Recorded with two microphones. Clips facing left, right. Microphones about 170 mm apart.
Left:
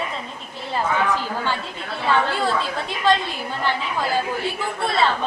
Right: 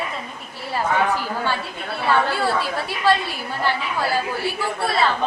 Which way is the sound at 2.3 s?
20° left (ahead or behind).